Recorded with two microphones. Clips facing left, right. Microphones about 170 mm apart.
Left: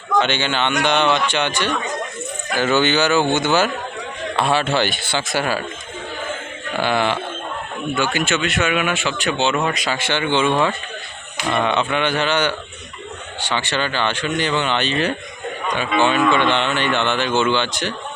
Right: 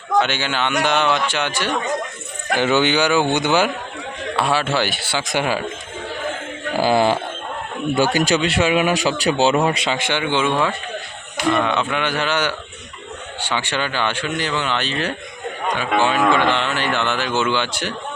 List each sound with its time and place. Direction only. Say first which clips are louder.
0.2 s speech: left 1 dB; 5° right (ahead or behind)
2.6 s speech: even; 15° right (ahead or behind)
6.7 s speech: right 3 dB; 35° right (ahead or behind); by 10.5 s 10° right (ahead or behind)
11.5 s speech: left 3 dB; centre (ahead or behind)